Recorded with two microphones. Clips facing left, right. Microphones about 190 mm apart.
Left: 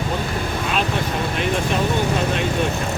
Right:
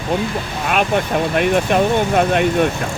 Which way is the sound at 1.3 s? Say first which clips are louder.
Right 7 dB; 60° right (ahead or behind).